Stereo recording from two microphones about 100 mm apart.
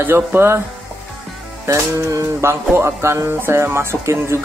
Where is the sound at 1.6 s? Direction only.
30° right (ahead or behind).